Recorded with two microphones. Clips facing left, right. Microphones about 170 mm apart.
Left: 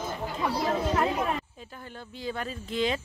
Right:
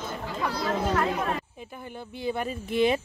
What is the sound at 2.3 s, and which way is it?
Speech, 15° right (ahead or behind).